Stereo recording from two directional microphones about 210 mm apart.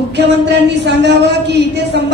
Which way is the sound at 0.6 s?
55° right (ahead or behind).